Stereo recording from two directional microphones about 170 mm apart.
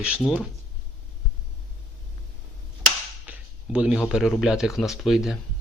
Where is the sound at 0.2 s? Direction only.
5° right (ahead or behind).